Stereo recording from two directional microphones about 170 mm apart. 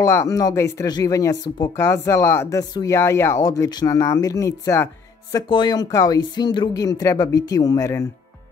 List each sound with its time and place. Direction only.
0.0 s speech: 15° left (ahead or behind)